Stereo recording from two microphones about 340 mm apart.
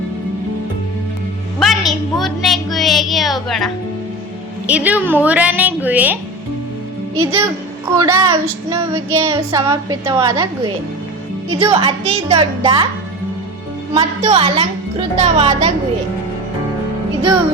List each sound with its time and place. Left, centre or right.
1.5 s a woman's voice: centre
7.3 s a woman's voice: centre
9.0 s child singing: right
9.5 s a woman's voice: centre
13.9 s a woman's voice: centre